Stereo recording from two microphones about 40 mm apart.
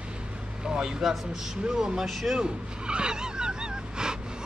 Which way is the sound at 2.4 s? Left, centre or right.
Right.